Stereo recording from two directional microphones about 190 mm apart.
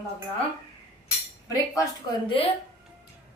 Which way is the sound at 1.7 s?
20° left (ahead or behind).